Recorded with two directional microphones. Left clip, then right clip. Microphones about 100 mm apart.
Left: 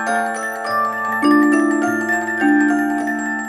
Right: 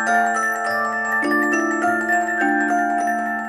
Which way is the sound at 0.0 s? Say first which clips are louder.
Right 2 dB; 15° right (ahead or behind).